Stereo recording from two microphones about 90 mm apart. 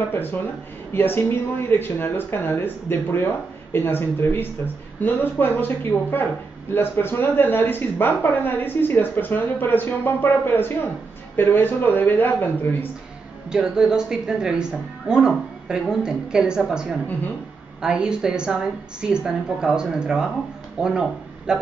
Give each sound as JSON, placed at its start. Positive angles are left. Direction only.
{"t": 0.1, "sound": "speech", "side_deg": 25}
{"t": 13.5, "sound": "speech", "side_deg": -10}